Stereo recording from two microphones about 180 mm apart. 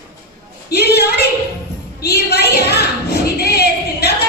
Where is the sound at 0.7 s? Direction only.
65° left (ahead or behind).